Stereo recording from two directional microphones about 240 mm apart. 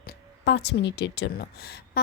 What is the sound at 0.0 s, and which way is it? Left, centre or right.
Speech, left.